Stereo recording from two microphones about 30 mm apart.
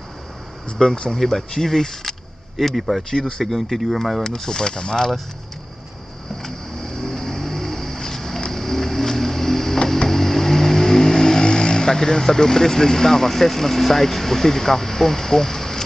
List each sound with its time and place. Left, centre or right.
0.8 s speech: left
2.5 s speech: centre
3.0 s speech: left
3.4 s speech: centre
4.4 s speech: left
6.4 s vehicle: centre